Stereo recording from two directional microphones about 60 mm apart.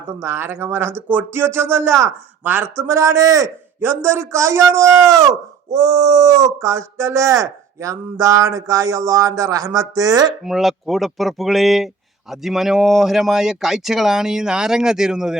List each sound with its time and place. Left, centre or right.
0.2 s a man's voice: right
1.4 s a man's voice: right
3.8 s a man's voice: right
5.7 s speech: right
10.4 s speech: centre